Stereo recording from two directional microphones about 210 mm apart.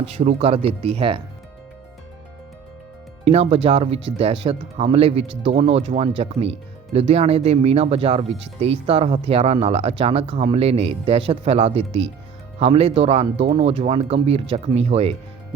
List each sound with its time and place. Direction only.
0.0 s speech: 30° right (ahead or behind)
3.2 s speech: 30° right (ahead or behind)